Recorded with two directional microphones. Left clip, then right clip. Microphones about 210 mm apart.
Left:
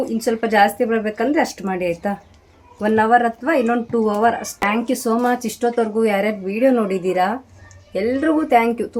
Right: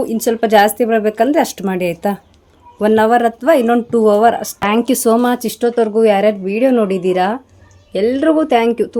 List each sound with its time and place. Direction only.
0.2 s a woman's voice: 50° right (ahead or behind)